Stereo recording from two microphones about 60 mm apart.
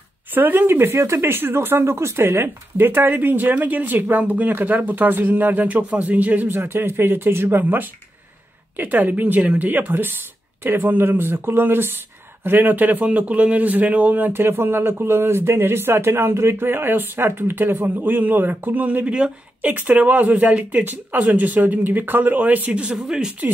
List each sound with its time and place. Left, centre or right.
0.3 s a man's voice: right
0.9 s a man's voice: right
19.1 s speech: centre
19.7 s speech: right
22.9 s speech: centre